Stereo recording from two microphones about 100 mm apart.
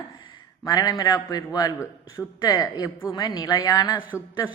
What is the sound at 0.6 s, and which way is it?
A man's voice, 40° left (ahead or behind).